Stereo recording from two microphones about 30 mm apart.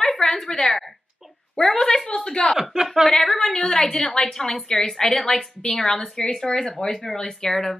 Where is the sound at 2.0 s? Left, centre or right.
Left.